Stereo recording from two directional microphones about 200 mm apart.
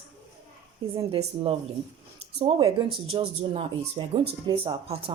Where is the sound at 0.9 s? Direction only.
30° right (ahead or behind).